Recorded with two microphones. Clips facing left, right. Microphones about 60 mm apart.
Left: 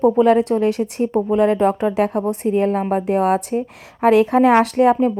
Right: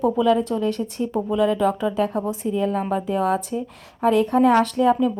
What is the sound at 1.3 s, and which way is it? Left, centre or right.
A woman's voice, left.